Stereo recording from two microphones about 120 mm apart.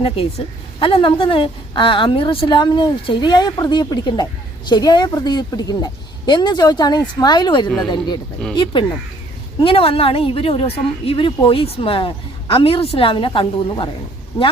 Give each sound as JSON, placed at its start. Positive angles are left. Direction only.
{"t": 0.0, "sound": "a woman's voice", "side_deg": 50}